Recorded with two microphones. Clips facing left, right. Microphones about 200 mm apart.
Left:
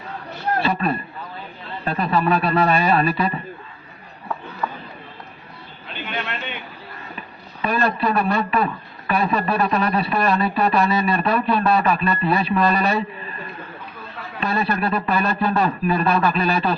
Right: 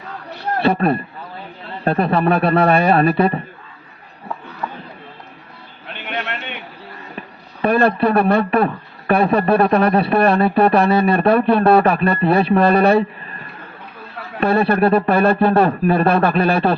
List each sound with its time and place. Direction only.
0.6 s speech: 55° right (ahead or behind)
6.1 s a sound: 65° right (ahead or behind)
7.2 s speech: 55° right (ahead or behind)
14.3 s speech: 60° right (ahead or behind)